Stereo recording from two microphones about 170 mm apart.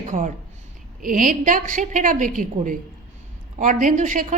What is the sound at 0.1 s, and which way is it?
A woman's voice, 50° right (ahead or behind).